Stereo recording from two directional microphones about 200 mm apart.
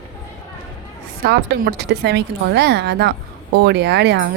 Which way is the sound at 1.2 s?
50° right (ahead or behind).